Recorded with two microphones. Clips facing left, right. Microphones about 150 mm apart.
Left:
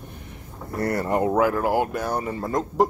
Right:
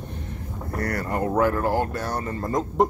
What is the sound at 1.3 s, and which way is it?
Speech, 5° left (ahead or behind).